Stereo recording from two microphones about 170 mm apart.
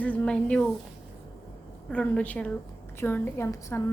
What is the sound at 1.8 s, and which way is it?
A woman's voice, 5° left (ahead or behind).